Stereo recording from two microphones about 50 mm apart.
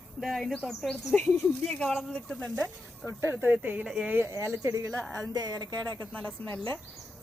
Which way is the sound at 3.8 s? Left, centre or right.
Centre.